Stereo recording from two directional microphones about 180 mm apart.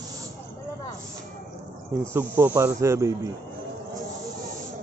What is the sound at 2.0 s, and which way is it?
Speech, 15° right (ahead or behind).